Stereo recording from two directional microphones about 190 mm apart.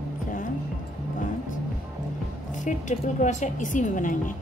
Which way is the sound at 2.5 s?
40° left (ahead or behind).